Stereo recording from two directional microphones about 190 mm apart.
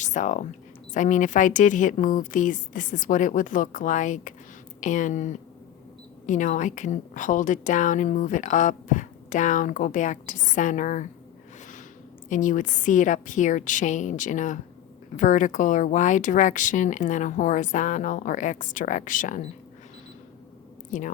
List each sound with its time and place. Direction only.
0.0 s a woman's voice: 40° left (ahead or behind)
12.3 s a woman's voice: 45° left (ahead or behind)
20.9 s a woman's voice: 40° left (ahead or behind)